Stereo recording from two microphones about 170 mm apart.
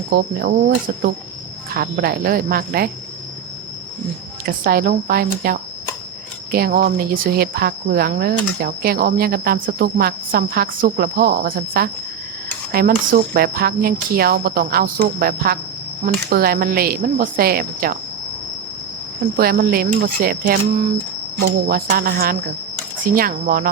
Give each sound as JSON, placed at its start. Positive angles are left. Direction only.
{"t": 0.1, "sound": "speech", "side_deg": -60}
{"t": 4.4, "sound": "speech", "side_deg": -60}
{"t": 19.4, "sound": "speech", "side_deg": -60}
{"t": 21.3, "sound": "speech", "side_deg": -80}
{"t": 21.8, "sound": "speech", "side_deg": -60}